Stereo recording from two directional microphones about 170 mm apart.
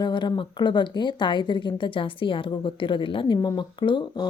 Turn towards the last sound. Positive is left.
turn(degrees=25)  # may be behind; listen again after turning